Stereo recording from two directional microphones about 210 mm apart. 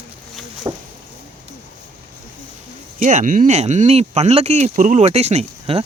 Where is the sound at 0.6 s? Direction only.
20° right (ahead or behind).